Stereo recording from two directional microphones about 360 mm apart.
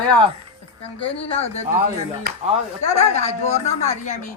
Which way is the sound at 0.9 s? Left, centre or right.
Centre.